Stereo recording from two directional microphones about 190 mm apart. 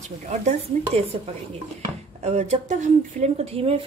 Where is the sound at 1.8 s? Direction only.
35° right (ahead or behind).